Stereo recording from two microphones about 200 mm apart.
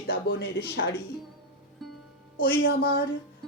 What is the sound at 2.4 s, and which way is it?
Speech, 50° left (ahead or behind).